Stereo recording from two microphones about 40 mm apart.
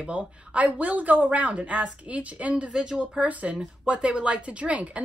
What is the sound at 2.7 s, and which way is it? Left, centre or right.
Speech, right.